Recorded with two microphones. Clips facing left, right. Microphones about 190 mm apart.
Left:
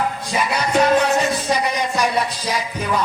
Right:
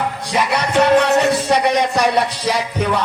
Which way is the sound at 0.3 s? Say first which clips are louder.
Right 5 dB; 70° right (ahead or behind).